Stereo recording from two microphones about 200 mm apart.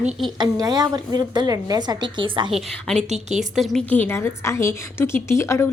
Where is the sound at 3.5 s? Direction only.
Centre (ahead or behind).